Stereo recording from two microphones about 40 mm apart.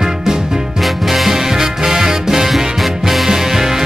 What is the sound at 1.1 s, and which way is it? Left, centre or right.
Music, centre.